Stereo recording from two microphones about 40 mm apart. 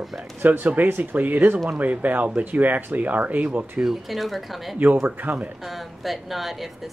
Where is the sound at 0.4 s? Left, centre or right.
Right.